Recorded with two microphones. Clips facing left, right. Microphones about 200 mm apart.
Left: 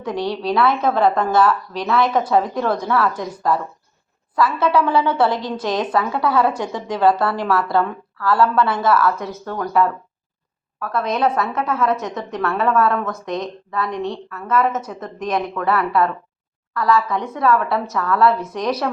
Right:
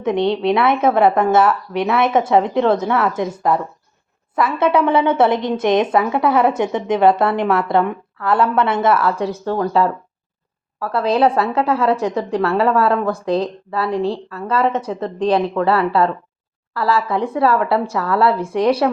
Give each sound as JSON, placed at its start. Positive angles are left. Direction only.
{"t": 0.0, "sound": "a woman's voice", "side_deg": -25}